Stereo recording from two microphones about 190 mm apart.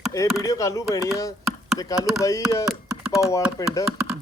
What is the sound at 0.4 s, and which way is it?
Speech, 20° left (ahead or behind).